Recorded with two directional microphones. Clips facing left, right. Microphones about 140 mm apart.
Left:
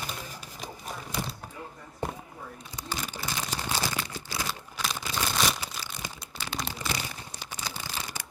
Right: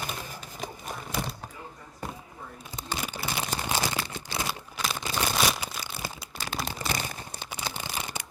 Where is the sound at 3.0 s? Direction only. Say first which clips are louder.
Right 3 dB; 10° right (ahead or behind).